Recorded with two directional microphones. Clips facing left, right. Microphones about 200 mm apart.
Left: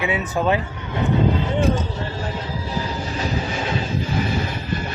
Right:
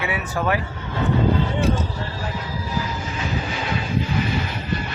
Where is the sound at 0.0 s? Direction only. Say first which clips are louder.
Left 3 dB; 20° left (ahead or behind).